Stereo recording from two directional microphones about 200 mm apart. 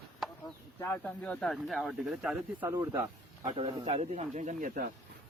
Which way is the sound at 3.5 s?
30° right (ahead or behind).